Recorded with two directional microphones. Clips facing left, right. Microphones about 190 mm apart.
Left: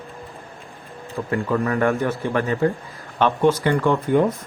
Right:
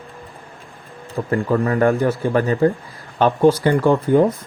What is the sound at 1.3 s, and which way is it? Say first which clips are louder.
Speech: right 3 dB; 35° right (ahead or behind).